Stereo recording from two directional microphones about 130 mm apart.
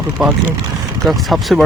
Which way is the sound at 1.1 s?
Centre (ahead or behind).